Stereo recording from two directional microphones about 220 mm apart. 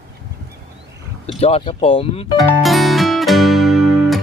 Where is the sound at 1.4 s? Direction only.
25° left (ahead or behind).